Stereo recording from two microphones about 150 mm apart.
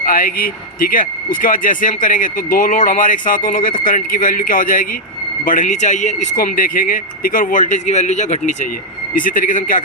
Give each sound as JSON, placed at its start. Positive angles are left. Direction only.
{"t": 0.0, "sound": "speech", "side_deg": 70}
{"t": 9.1, "sound": "speech", "side_deg": 65}